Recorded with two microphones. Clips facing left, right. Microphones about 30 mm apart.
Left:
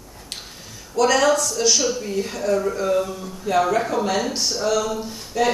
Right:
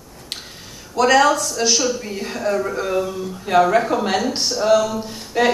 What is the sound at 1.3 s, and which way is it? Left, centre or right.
Speech, centre.